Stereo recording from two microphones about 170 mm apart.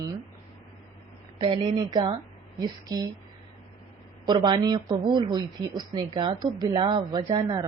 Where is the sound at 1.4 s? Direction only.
30° right (ahead or behind).